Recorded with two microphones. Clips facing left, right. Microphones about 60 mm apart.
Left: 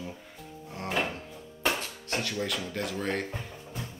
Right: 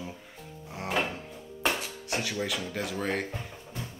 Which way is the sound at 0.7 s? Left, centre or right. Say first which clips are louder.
Right 1 dB; centre.